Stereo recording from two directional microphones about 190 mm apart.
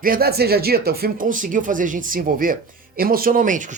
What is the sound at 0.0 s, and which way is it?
Speech, 50° right (ahead or behind).